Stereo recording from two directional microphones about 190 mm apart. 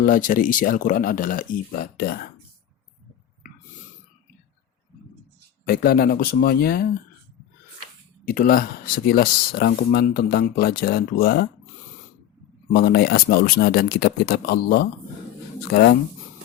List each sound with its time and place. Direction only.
0.0 s speech: 45° left (ahead or behind)
5.6 s speech: 50° left (ahead or behind)
8.2 s speech: 50° left (ahead or behind)
12.7 s speech: 55° left (ahead or behind)